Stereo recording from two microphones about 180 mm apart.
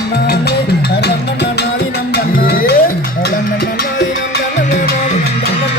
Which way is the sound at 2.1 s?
55° left (ahead or behind).